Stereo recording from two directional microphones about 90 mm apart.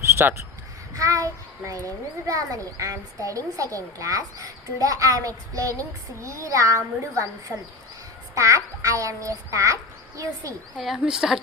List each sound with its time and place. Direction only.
0.2 s speech: 20° right (ahead or behind)
0.9 s a child's voice: 40° right (ahead or behind)
8.4 s speech: 35° right (ahead or behind)
10.8 s speech: 5° right (ahead or behind)